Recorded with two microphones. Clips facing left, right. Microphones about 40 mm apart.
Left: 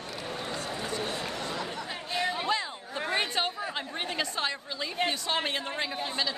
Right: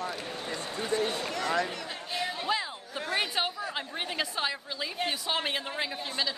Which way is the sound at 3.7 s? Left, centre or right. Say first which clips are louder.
Left 1 dB; centre.